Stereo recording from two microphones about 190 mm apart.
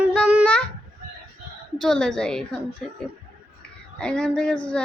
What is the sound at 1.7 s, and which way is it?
Speech, 5° left (ahead or behind).